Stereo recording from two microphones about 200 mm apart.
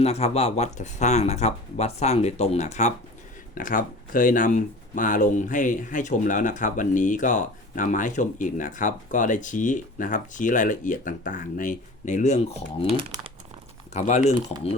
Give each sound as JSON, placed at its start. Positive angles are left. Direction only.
{"t": 0.0, "sound": "speech", "side_deg": 30}
{"t": 12.9, "sound": "speech", "side_deg": -25}
{"t": 13.9, "sound": "speech", "side_deg": 35}